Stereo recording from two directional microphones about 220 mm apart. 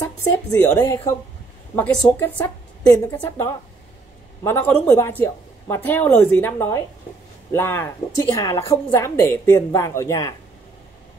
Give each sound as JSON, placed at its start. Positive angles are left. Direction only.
{"t": 0.0, "sound": "a woman's voice", "side_deg": 15}